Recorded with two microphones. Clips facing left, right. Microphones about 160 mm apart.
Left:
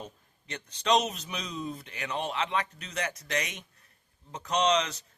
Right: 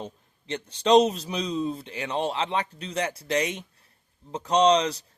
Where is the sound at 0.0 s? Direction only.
30° right (ahead or behind).